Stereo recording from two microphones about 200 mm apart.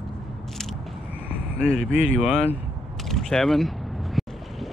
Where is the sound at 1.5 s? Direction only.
5° right (ahead or behind).